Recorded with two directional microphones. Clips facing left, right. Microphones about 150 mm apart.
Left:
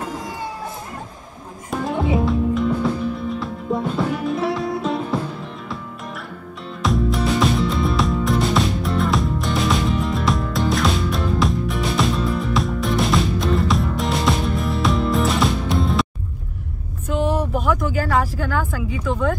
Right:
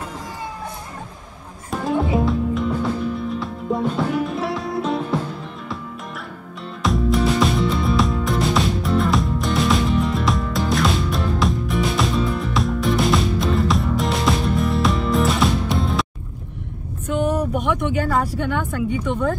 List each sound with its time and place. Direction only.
1.7 s music: centre (ahead or behind)
6.8 s music: centre (ahead or behind)
17.1 s vehicle: centre (ahead or behind)
17.6 s a sound: 5° left (ahead or behind)